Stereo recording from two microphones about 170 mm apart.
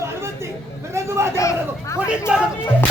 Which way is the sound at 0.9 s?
15° right (ahead or behind).